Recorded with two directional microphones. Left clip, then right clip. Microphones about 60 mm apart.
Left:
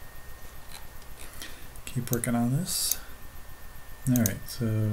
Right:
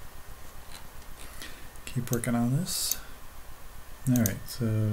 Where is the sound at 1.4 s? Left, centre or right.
Centre.